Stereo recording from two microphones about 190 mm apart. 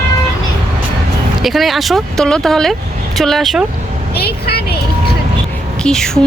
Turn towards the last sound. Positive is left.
turn(degrees=5)  # may be behind; listen again after turning